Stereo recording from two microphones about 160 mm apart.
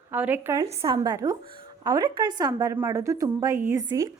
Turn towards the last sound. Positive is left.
turn(degrees=-20)  # may be behind; listen again after turning